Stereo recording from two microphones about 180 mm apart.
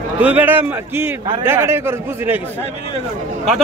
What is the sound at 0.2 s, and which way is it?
A man's voice, 10° right (ahead or behind).